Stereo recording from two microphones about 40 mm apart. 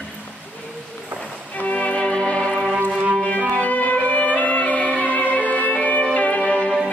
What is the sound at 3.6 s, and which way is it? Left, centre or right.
Violin, left.